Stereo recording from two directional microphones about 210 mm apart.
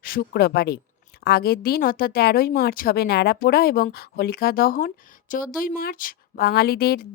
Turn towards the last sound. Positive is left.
turn(degrees=45)  # may be behind; listen again after turning